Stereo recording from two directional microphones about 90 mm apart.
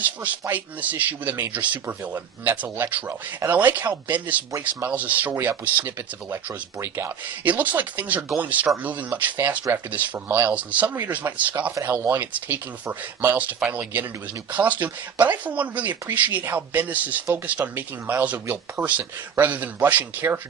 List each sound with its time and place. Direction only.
0.5 s speech: 20° right (ahead or behind)